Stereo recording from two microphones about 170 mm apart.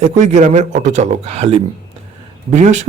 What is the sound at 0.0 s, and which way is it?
A man's voice, 40° right (ahead or behind).